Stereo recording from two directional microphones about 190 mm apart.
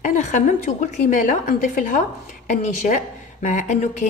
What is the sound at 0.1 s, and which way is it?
A woman's voice, 40° left (ahead or behind).